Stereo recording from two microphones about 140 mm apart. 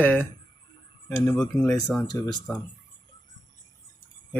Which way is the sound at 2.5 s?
20° left (ahead or behind).